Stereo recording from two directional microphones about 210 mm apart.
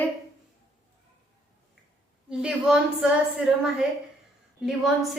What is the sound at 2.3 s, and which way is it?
A woman's voice, 5° right (ahead or behind).